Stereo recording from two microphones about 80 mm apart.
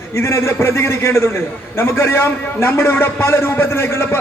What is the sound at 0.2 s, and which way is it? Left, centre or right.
A man's voice, left.